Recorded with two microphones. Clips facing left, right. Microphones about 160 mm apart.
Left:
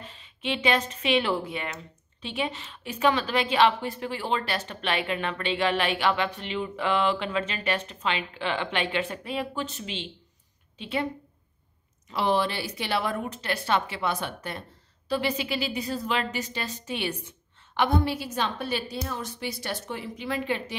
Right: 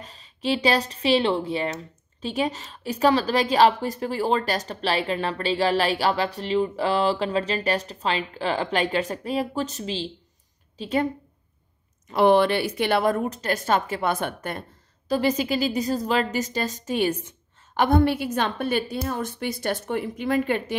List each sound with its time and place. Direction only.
0.0 s a woman's voice: 40° right (ahead or behind)
12.1 s a woman's voice: 55° right (ahead or behind)
15.0 s a woman's voice: 40° right (ahead or behind)
17.7 s a woman's voice: 55° right (ahead or behind)